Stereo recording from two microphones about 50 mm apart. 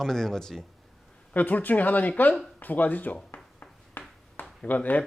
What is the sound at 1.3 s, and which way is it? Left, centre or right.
Speech, left.